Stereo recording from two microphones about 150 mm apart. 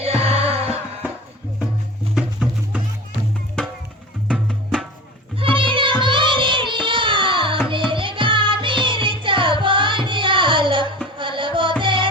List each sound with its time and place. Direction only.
0.2 s music: 40° right (ahead or behind)
2.1 s music: 5° right (ahead or behind)
4.3 s music: centre (ahead or behind)
5.4 s music: 35° right (ahead or behind)